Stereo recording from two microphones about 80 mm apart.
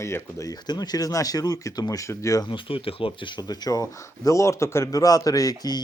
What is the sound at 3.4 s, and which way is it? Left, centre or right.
Speech, left.